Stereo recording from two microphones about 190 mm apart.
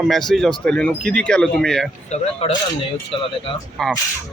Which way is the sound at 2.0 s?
35° left (ahead or behind).